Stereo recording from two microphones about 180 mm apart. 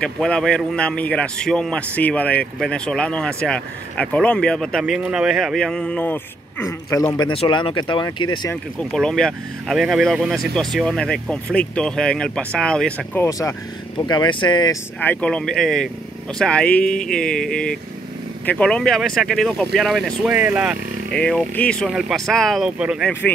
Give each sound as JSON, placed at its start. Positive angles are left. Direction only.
{"t": 0.0, "sound": "a man's voice", "side_deg": 5}
{"t": 7.2, "sound": "speech", "side_deg": 25}
{"t": 8.7, "sound": "a man's voice", "side_deg": 0}
{"t": 15.0, "sound": "a man's voice", "side_deg": 10}
{"t": 21.1, "sound": "a man's voice", "side_deg": 5}